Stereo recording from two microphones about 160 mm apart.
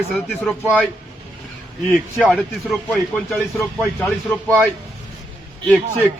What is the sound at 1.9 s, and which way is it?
Speech, centre (ahead or behind).